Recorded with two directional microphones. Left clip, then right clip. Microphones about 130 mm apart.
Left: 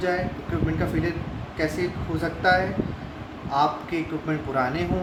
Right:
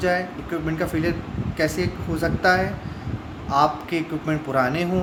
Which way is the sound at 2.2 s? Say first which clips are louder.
Right 2 dB; 90° right.